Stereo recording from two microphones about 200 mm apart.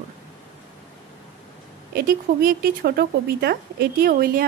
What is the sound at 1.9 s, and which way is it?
Speech, 50° right (ahead or behind).